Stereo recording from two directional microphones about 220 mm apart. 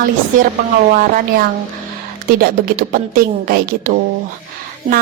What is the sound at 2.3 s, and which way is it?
Speech, 40° right (ahead or behind).